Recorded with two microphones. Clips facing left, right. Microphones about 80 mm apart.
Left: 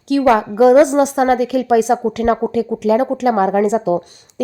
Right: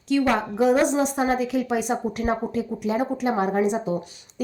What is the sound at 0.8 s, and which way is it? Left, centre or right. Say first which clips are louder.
A woman's voice: left 8 dB; left.